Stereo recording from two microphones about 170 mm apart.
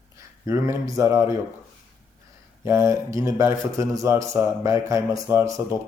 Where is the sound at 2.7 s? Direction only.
15° right (ahead or behind).